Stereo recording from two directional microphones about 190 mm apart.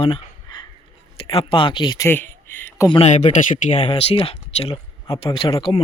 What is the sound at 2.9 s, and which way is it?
Speech, 35° left (ahead or behind).